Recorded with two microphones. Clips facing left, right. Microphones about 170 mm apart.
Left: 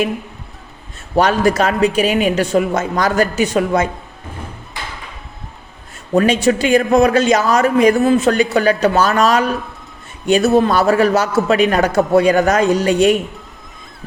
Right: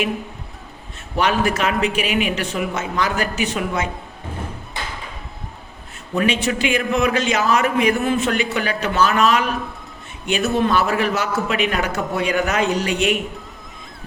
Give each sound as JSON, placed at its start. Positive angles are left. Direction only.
{"t": 1.1, "sound": "speech", "side_deg": 40}
{"t": 6.1, "sound": "speech", "side_deg": 40}